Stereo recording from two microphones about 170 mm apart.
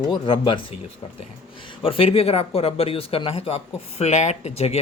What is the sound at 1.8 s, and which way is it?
Speech, 35° left (ahead or behind).